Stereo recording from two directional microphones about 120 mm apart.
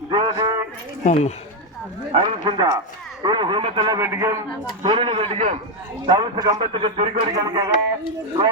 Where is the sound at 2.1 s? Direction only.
45° right (ahead or behind).